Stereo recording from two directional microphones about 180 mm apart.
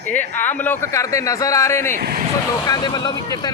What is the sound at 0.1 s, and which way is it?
Speech, 10° left (ahead or behind).